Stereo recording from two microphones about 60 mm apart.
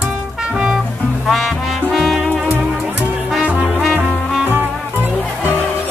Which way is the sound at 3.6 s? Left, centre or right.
Centre.